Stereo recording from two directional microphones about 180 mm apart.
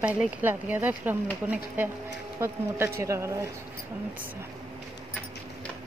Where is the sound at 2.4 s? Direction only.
15° right (ahead or behind).